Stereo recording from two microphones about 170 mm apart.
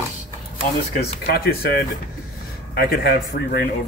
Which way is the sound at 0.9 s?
65° left (ahead or behind).